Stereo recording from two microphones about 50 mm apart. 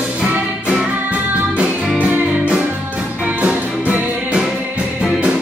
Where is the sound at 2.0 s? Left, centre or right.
Right.